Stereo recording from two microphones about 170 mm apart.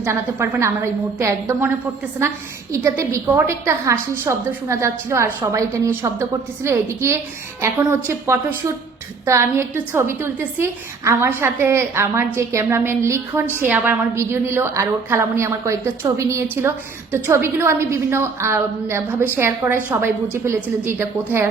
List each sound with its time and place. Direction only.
0.0 s a woman's voice: 15° right (ahead or behind)
2.7 s a woman's voice: 15° right (ahead or behind)